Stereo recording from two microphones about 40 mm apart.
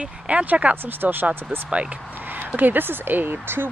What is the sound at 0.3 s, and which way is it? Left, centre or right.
Speech, right.